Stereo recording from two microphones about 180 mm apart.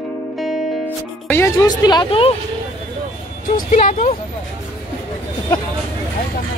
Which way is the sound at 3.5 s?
40° left (ahead or behind).